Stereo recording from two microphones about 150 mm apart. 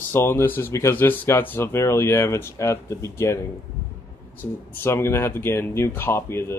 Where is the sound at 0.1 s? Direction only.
15° left (ahead or behind).